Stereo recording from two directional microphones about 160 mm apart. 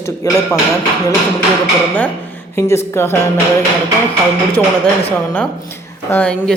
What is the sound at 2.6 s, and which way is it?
Speech, 15° left (ahead or behind).